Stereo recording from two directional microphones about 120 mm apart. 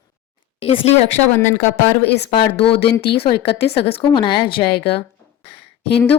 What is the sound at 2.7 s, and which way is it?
Speech, 50° left (ahead or behind).